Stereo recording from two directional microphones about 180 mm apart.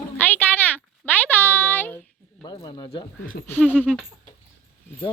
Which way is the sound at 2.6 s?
25° left (ahead or behind).